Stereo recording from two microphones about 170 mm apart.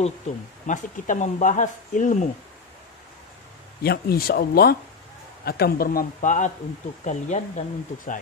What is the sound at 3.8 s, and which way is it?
A man's voice, 65° left (ahead or behind).